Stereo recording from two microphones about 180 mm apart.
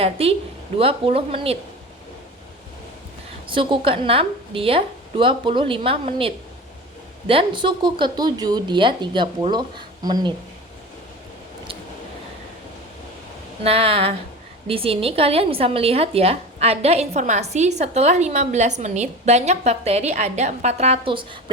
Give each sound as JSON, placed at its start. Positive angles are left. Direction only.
{"t": 0.0, "sound": "a woman's voice", "side_deg": -35}
{"t": 3.4, "sound": "a woman's voice", "side_deg": -30}
{"t": 13.7, "sound": "a woman's voice", "side_deg": -35}